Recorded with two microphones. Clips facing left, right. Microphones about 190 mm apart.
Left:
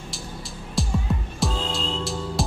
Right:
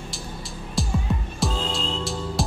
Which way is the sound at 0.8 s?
Centre (ahead or behind).